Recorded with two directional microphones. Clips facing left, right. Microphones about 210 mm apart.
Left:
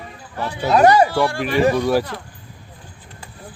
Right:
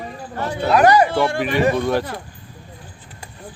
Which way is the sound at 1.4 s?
5° left (ahead or behind).